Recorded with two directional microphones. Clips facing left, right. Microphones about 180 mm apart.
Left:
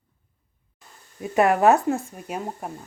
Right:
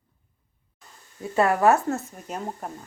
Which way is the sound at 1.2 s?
15° left (ahead or behind).